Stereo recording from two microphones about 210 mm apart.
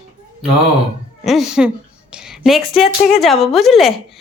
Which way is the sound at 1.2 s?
Centre (ahead or behind).